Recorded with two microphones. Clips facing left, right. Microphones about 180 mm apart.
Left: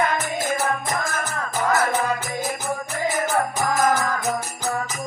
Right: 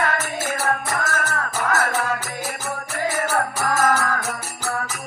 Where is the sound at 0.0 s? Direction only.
15° left (ahead or behind).